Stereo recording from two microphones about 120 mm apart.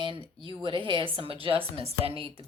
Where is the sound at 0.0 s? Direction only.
45° right (ahead or behind).